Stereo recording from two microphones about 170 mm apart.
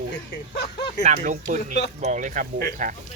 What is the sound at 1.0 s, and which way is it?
Speech, 45° right (ahead or behind).